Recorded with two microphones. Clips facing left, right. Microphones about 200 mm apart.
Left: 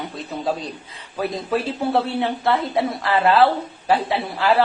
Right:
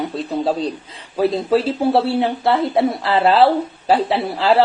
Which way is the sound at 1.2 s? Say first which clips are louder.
Right 7 dB; 25° right (ahead or behind).